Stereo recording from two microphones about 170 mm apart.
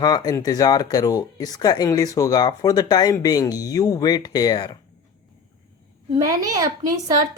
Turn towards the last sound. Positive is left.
turn(degrees=-20)  # may be behind; listen again after turning